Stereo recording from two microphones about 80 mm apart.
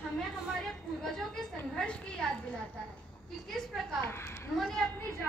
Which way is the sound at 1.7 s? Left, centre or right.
Centre.